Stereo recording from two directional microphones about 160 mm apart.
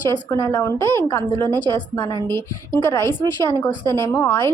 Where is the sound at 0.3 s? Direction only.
15° left (ahead or behind).